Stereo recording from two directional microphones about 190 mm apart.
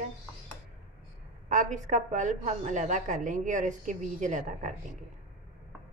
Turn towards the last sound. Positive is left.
turn(degrees=-40)  # may be behind; listen again after turning